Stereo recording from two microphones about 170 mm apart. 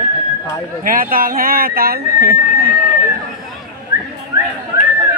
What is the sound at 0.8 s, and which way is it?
Speech, 55° right (ahead or behind).